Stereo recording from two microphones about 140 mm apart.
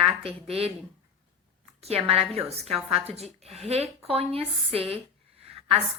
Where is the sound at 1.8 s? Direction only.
45° right (ahead or behind).